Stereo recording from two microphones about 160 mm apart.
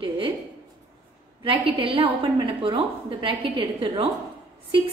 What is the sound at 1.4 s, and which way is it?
A woman's voice, 35° right (ahead or behind).